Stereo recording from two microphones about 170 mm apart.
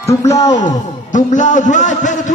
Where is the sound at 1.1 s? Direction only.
45° left (ahead or behind).